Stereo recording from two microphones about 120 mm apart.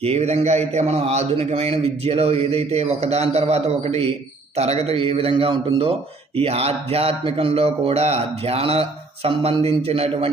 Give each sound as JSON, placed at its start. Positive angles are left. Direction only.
{"t": 0.0, "sound": "a man's voice", "side_deg": -60}